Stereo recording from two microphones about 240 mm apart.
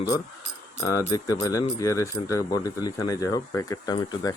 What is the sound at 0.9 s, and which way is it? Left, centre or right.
Speech, centre.